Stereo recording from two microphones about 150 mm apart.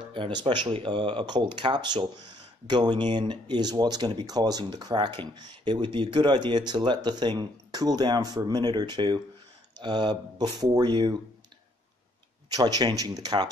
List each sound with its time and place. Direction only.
0.1 s speech: 30° right (ahead or behind)
12.4 s speech: 25° right (ahead or behind)